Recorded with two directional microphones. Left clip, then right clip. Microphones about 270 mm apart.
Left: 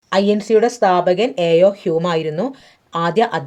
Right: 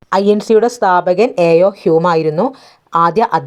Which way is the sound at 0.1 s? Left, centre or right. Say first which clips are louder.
Right 4 dB; centre.